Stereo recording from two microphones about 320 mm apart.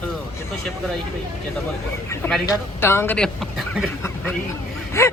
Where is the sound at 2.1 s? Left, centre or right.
Centre.